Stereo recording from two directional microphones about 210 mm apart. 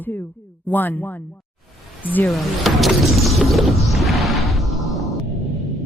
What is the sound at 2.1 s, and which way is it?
Music, 5° left (ahead or behind).